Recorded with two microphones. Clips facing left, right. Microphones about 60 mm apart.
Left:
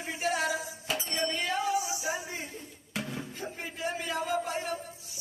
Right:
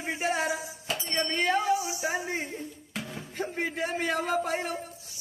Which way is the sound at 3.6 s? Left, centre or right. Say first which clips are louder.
Right 5 dB; right.